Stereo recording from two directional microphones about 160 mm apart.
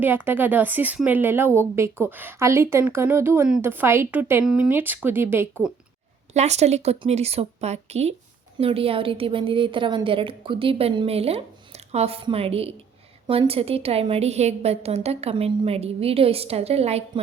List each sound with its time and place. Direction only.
0.0 s speech: 10° right (ahead or behind)
6.3 s a woman's voice: 45° right (ahead or behind)